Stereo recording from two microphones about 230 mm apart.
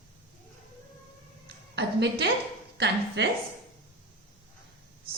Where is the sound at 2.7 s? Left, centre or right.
Right.